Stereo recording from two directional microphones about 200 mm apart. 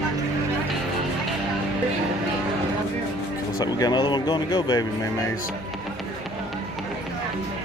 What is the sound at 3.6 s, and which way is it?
Speech, 20° left (ahead or behind).